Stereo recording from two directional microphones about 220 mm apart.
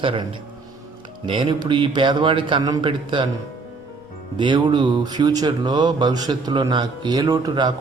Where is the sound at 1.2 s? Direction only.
20° right (ahead or behind).